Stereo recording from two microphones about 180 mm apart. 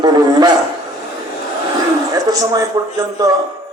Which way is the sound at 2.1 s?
20° right (ahead or behind).